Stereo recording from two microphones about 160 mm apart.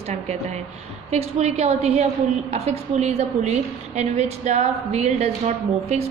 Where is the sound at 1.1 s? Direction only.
40° right (ahead or behind).